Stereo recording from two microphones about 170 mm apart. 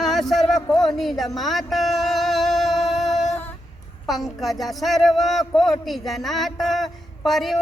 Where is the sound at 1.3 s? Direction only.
Centre (ahead or behind).